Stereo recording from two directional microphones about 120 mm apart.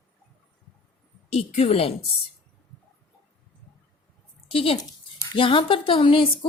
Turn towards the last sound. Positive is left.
turn(degrees=45)  # may be behind; listen again after turning